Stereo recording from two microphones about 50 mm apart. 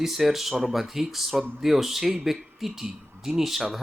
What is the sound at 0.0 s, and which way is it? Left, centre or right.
Speech, centre.